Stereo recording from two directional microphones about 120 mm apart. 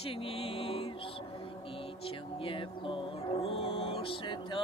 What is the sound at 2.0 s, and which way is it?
Music, 50° left (ahead or behind).